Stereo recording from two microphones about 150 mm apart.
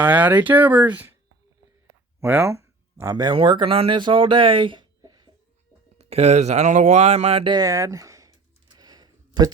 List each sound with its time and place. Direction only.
0.0 s speech: 10° right (ahead or behind)
2.2 s speech: 15° right (ahead or behind)
6.0 s speech: 45° right (ahead or behind)
7.5 s a sound: 25° right (ahead or behind)